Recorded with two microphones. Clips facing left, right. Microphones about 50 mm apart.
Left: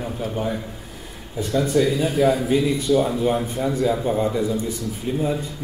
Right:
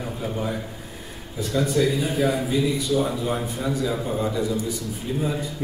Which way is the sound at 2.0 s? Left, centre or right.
Left.